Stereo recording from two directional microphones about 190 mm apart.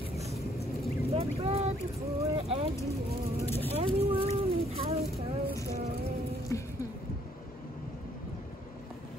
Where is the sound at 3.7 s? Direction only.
30° right (ahead or behind).